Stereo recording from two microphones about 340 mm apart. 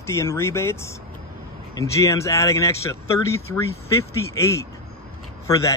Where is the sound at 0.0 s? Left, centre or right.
Centre.